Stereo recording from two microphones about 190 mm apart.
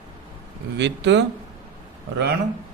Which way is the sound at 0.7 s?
65° right (ahead or behind).